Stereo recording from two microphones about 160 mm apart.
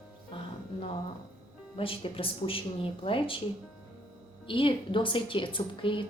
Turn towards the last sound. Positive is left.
turn(degrees=30)  # may be behind; listen again after turning